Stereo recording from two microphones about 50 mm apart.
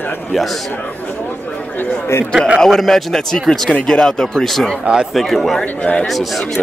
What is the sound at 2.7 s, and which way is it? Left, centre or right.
Speech, centre.